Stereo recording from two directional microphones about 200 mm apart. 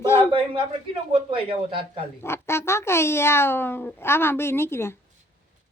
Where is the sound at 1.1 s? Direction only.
25° right (ahead or behind).